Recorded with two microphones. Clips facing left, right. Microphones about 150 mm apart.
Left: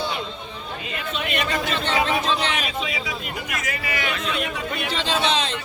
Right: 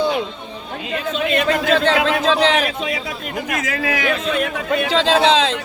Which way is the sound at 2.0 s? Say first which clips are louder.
Right 6 dB; 90° right.